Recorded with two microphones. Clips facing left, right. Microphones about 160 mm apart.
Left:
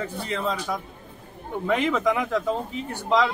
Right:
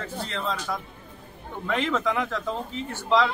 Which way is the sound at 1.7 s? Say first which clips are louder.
Left 1 dB; 15° left (ahead or behind).